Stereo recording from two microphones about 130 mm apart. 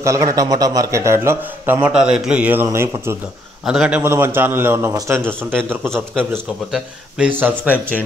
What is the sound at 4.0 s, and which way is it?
A man's voice, 20° right (ahead or behind).